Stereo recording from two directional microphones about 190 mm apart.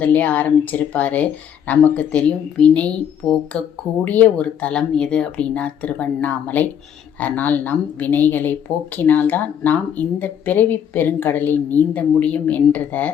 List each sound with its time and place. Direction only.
0.0 s speech: 5° left (ahead or behind)